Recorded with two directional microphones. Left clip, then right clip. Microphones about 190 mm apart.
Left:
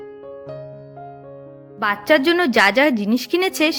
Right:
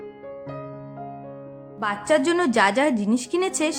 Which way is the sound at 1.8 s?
25° left (ahead or behind).